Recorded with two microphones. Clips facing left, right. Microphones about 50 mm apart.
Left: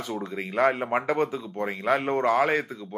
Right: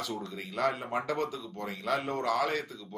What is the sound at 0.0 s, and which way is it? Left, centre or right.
Speech, left.